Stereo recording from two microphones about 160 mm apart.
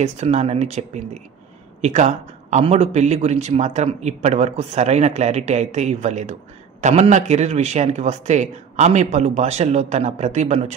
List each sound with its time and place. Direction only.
0.0 s speech: 45° right (ahead or behind)